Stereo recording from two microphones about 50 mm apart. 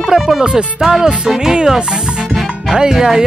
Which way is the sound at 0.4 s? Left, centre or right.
Centre.